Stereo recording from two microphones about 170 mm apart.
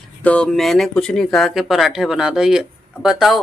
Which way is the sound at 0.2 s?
5° left (ahead or behind).